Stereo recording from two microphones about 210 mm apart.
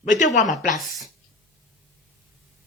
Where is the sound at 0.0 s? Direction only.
35° left (ahead or behind).